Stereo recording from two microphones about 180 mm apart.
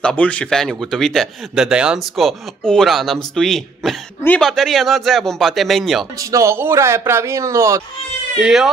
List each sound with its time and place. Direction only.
0.0 s speech: 5° left (ahead or behind)
6.1 s speech: 15° right (ahead or behind)
8.4 s speech: centre (ahead or behind)